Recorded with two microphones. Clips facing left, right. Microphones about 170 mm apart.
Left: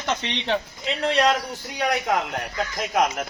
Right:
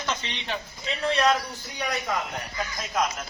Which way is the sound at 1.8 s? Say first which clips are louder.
Left 6 dB; 70° left (ahead or behind).